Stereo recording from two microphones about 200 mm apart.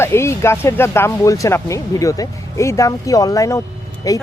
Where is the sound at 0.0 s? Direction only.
15° left (ahead or behind).